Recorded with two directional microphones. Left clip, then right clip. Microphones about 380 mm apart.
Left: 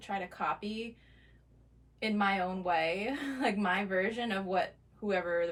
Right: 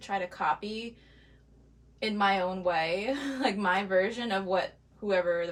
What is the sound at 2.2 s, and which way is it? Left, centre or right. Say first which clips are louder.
A woman's voice: right 5 dB; centre.